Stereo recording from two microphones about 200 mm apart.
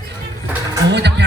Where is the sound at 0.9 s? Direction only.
60° right (ahead or behind).